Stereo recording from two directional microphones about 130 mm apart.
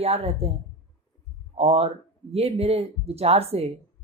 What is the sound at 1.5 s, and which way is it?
Speech, 50° right (ahead or behind).